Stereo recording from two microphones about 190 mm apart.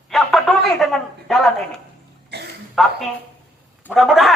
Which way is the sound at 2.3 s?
60° right (ahead or behind).